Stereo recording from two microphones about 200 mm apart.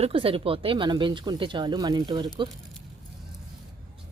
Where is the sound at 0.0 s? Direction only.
30° right (ahead or behind).